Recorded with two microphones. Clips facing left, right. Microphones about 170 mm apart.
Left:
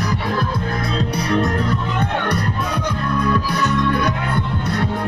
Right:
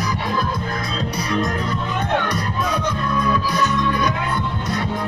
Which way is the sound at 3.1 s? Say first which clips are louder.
Left 1 dB; 60° left (ahead or behind).